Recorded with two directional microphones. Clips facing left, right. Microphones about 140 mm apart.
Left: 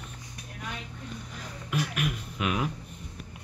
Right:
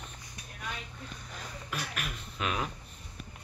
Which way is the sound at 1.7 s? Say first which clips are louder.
Left 9 dB; 15° left (ahead or behind).